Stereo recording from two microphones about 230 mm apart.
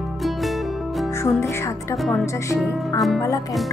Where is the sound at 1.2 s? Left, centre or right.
Centre.